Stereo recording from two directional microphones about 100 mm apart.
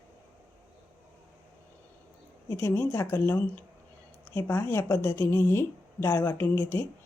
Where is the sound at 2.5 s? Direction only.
25° left (ahead or behind).